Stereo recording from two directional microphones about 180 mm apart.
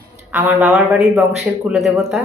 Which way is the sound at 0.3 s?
10° right (ahead or behind).